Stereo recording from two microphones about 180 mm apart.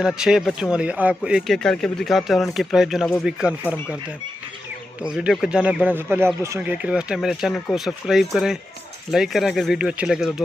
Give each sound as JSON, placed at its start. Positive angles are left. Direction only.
{"t": 0.0, "sound": "speech", "side_deg": -5}
{"t": 5.0, "sound": "speech", "side_deg": -5}